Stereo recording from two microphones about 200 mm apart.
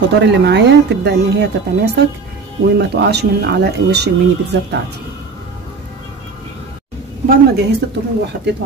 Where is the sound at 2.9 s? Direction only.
55° right (ahead or behind).